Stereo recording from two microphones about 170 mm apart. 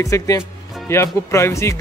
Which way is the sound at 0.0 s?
20° left (ahead or behind).